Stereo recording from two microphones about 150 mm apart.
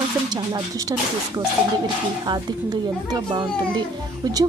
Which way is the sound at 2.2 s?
30° right (ahead or behind).